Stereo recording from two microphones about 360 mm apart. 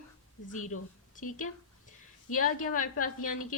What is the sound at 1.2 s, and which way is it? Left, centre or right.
A woman's voice, left.